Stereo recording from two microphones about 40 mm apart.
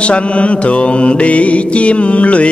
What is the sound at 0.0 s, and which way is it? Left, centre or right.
Mantra, left.